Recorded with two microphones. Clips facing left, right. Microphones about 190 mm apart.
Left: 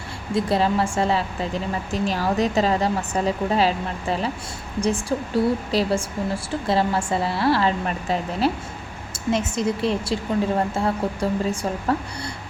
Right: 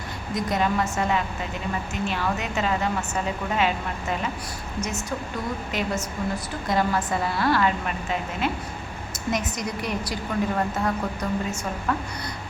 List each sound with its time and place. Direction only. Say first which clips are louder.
0.3 s a woman's voice: left 4 dB; 30° left (ahead or behind)